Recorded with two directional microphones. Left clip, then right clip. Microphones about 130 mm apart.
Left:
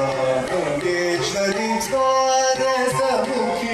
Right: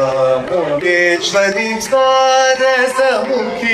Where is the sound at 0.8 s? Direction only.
25° right (ahead or behind).